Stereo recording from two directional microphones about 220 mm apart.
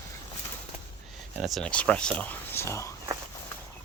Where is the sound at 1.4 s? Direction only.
Centre (ahead or behind).